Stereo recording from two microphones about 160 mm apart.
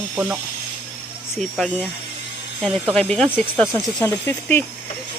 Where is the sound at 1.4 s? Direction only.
5° left (ahead or behind).